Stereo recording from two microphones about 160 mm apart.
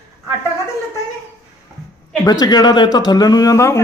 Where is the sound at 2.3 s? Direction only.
25° left (ahead or behind).